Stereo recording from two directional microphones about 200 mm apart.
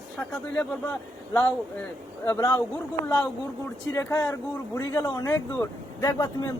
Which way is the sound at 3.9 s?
10° left (ahead or behind).